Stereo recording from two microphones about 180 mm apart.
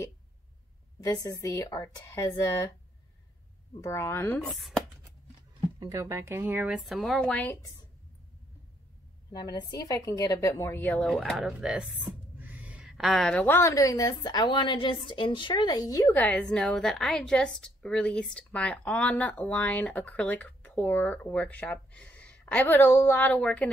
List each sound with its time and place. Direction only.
1.0 s a woman's voice: 20° left (ahead or behind)
3.8 s speech: 15° left (ahead or behind)
4.5 s speech: centre (ahead or behind)
5.8 s speech: 20° right (ahead or behind); by 7.5 s 5° left (ahead or behind)
9.3 s a woman's voice: 25° left (ahead or behind); by 23.7 s 5° left (ahead or behind)